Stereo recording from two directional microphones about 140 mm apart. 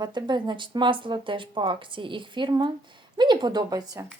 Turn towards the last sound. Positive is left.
turn(degrees=-25)  # may be behind; listen again after turning